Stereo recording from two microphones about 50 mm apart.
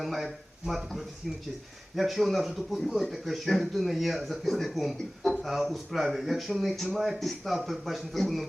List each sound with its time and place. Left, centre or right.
0.0 s speech: centre
2.0 s speech: centre